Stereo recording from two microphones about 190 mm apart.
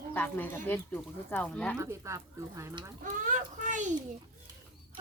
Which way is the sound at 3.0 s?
40° right (ahead or behind).